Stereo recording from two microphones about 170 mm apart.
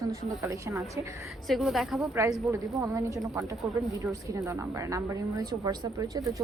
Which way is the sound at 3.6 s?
Centre (ahead or behind).